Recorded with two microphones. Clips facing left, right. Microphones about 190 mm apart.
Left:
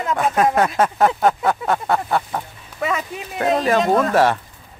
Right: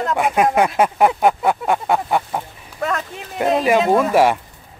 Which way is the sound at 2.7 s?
5° left (ahead or behind).